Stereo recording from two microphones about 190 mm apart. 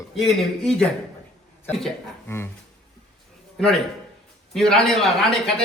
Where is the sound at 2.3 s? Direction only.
15° left (ahead or behind).